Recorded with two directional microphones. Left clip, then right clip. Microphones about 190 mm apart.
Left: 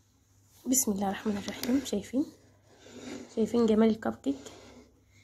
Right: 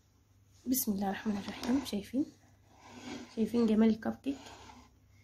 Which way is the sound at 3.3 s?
20° left (ahead or behind).